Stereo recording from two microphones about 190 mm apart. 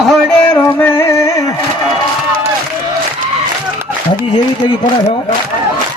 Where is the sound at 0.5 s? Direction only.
10° left (ahead or behind).